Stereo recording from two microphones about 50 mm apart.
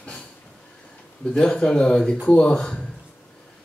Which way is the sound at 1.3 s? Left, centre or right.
Centre.